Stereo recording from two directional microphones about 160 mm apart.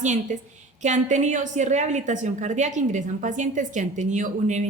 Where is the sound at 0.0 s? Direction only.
50° right (ahead or behind).